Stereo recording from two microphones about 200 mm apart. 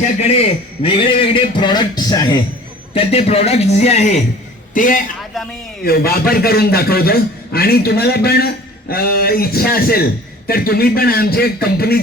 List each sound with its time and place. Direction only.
0.0 s a man's voice: 30° left (ahead or behind); by 11.9 s 50° left (ahead or behind)